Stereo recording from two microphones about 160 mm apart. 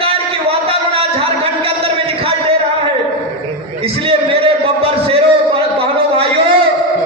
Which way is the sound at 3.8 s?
35° right (ahead or behind).